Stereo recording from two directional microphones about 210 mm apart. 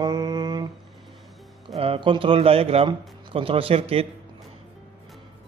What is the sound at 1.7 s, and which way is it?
A man's voice, 25° right (ahead or behind).